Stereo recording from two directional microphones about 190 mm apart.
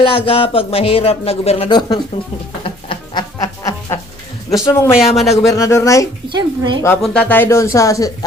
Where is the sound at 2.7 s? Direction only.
30° left (ahead or behind).